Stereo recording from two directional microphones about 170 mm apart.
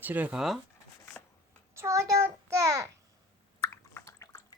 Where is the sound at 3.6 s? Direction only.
15° left (ahead or behind).